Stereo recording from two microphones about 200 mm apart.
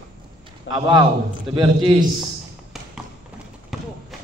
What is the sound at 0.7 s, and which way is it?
A man's voice, 20° right (ahead or behind).